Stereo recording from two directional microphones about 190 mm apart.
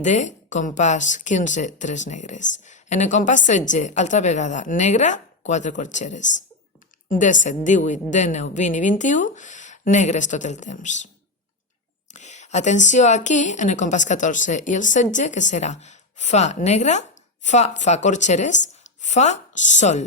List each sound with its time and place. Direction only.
0.0 s a woman's voice: 40° left (ahead or behind)
12.1 s a woman's voice: 40° left (ahead or behind)